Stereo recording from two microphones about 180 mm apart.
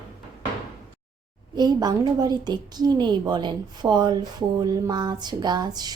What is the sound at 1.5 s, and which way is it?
A woman's voice, 20° right (ahead or behind).